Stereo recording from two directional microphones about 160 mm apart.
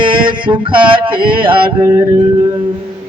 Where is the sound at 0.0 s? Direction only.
30° right (ahead or behind).